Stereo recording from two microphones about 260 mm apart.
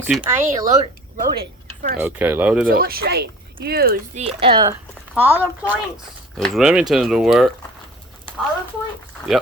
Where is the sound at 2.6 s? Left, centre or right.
Right; by 4.7 s centre.